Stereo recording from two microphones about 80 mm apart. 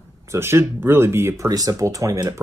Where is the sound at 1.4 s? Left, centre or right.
Right.